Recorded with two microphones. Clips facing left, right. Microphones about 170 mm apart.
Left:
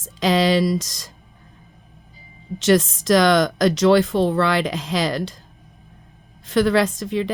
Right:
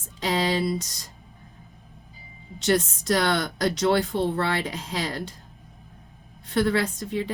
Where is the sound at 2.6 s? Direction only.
90° left.